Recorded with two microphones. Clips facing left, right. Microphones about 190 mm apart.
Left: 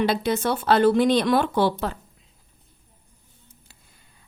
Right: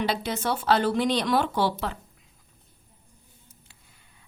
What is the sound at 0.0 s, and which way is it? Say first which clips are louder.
Speech: left 5 dB; 55° left (ahead or behind).